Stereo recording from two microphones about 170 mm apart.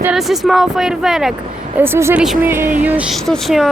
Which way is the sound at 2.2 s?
Centre (ahead or behind).